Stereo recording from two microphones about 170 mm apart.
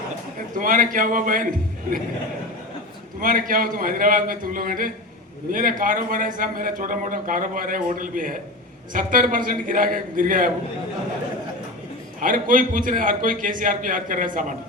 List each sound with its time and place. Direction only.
0.6 s a man's voice: 55° right (ahead or behind)
3.2 s a man's voice: 55° right (ahead or behind)
12.2 s a man's voice: 55° right (ahead or behind)